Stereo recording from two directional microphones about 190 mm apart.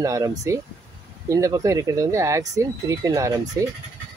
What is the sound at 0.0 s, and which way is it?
Speech, 15° right (ahead or behind).